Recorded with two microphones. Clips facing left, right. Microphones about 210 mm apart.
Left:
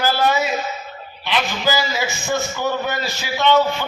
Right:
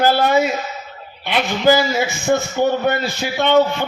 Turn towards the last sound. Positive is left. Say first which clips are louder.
# right 2 dB
turn(degrees=-55)  # may be behind; listen again after turning